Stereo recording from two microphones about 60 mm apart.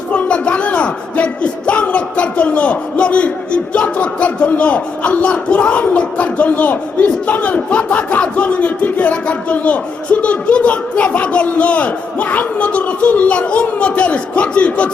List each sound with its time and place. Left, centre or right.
0.1 s speech: centre